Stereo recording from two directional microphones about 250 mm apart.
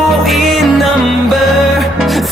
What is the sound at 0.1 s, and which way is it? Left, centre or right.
Music, centre.